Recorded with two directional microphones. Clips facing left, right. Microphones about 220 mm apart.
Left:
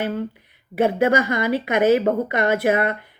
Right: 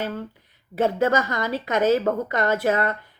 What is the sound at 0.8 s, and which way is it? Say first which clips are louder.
A woman's voice: left 3 dB; 10° left (ahead or behind).